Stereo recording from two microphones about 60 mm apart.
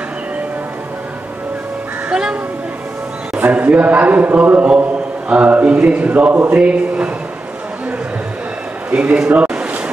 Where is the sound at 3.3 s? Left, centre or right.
Right.